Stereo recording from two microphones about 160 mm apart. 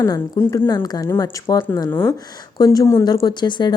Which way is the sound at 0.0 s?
20° left (ahead or behind).